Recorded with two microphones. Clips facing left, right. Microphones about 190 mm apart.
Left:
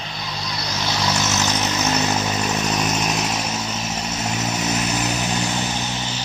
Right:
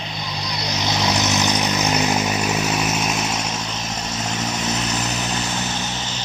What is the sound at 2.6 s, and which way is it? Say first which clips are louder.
Vehicle: even; 5° right (ahead or behind).